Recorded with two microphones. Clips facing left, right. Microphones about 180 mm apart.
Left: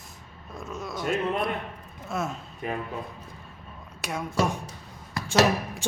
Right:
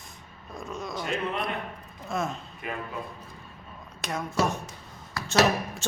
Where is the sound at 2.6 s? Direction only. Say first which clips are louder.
Left 4 dB; 35° left (ahead or behind).